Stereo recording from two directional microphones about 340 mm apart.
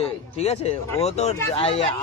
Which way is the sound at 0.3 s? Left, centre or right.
Centre.